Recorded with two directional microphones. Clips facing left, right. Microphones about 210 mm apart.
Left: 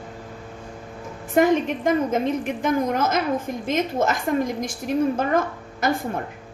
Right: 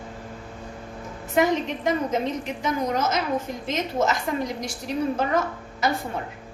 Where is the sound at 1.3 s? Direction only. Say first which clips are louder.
Left 4 dB; 50° left (ahead or behind).